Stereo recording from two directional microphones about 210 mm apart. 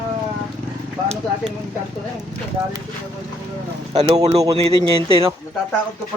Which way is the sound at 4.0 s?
20° right (ahead or behind).